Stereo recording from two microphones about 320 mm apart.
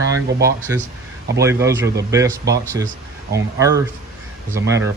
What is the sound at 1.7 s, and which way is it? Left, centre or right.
Speech, right.